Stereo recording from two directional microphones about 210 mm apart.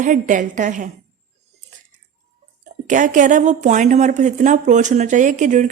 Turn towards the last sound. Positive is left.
turn(degrees=-35)  # may be behind; listen again after turning